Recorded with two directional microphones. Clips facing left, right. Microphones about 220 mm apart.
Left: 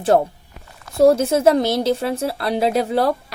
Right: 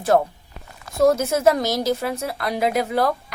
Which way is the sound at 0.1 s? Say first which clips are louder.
Even; 35° left (ahead or behind).